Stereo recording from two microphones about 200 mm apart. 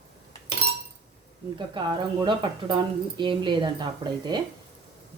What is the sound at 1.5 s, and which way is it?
Speech, 25° right (ahead or behind).